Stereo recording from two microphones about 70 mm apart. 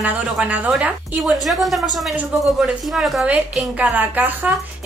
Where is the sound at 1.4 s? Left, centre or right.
Centre.